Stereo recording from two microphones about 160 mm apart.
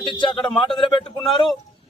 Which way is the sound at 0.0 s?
30° left (ahead or behind).